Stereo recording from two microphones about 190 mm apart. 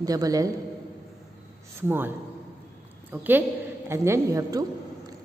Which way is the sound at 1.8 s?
10° right (ahead or behind).